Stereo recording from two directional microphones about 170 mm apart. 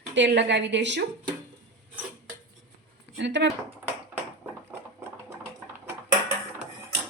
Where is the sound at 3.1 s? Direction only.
90° right.